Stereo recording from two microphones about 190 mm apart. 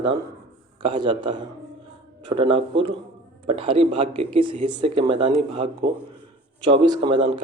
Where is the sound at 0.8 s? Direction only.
25° right (ahead or behind).